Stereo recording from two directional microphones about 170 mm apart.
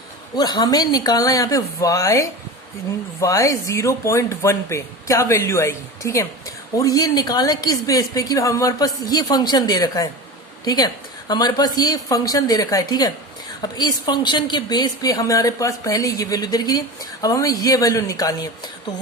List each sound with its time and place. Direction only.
0.3 s a woman's voice: 25° left (ahead or behind)